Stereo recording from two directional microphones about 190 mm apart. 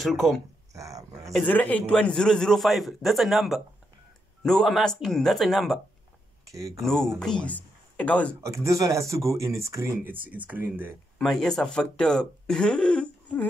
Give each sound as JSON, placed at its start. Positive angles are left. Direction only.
{"t": 0.0, "sound": "a man's voice", "side_deg": 0}
{"t": 0.7, "sound": "a sound", "side_deg": -15}
{"t": 1.3, "sound": "a man's voice", "side_deg": 10}
{"t": 6.5, "sound": "speech", "side_deg": -15}
{"t": 6.8, "sound": "a man's voice", "side_deg": 5}
{"t": 8.6, "sound": "speech", "side_deg": -15}
{"t": 11.1, "sound": "a man's voice", "side_deg": 5}